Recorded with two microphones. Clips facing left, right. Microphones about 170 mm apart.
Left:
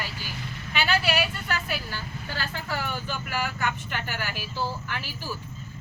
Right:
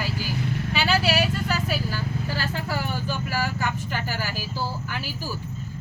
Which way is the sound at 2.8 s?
40° right (ahead or behind).